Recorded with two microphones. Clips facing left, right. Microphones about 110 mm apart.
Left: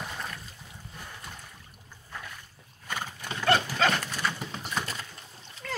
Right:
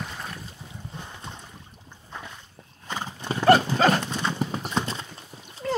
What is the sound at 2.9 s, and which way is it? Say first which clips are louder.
Horse: right 3 dB; 20° right (ahead or behind).